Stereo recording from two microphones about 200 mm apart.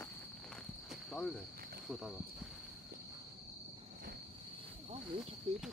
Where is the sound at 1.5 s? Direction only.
50° right (ahead or behind).